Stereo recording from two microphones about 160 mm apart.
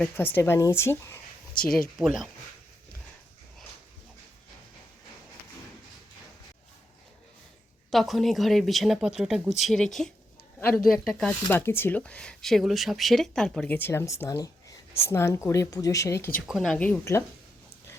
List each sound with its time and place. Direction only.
0.3 s speech: 15° left (ahead or behind)
2.0 s speech: centre (ahead or behind)
7.9 s speech: centre (ahead or behind)
11.4 s speech: 15° left (ahead or behind)
16.5 s speech: centre (ahead or behind); by 17.2 s 15° left (ahead or behind)